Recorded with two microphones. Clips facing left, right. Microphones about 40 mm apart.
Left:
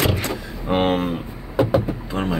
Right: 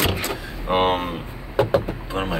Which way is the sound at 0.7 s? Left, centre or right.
Centre.